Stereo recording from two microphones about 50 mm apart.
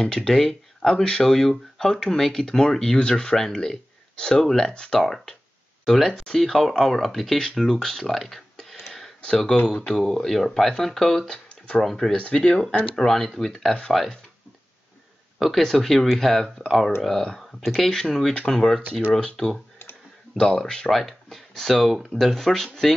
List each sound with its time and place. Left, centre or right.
0.0 s speech: centre
8.7 s a sound: centre
9.7 s speech: centre
9.9 s speech: centre
12.1 s speech: centre
12.9 s speech: centre
15.3 s a sound: centre
15.6 s speech: centre
20.9 s a sound: centre
21.8 s speech: centre
22.3 s speech: centre